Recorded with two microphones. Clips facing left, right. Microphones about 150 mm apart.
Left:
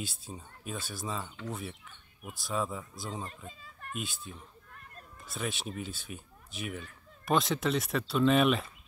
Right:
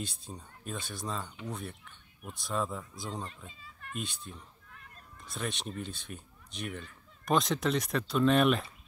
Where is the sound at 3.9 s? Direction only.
Centre (ahead or behind).